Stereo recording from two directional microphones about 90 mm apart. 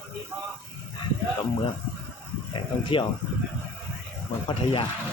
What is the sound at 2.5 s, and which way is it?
Speech, 70° left (ahead or behind).